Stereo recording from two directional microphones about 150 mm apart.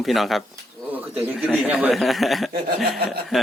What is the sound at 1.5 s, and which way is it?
Speech, 5° right (ahead or behind).